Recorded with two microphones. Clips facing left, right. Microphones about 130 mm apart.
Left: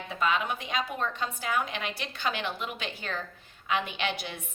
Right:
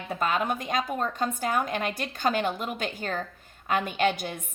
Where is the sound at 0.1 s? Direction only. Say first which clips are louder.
Right 2 dB; 45° right (ahead or behind).